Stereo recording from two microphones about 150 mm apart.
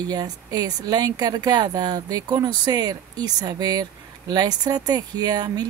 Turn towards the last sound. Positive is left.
turn(degrees=-25)  # may be behind; listen again after turning